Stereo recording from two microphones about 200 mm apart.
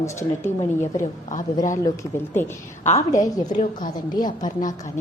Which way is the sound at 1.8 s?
15° left (ahead or behind).